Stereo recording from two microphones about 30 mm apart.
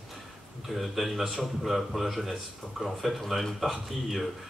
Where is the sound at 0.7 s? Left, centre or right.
Centre.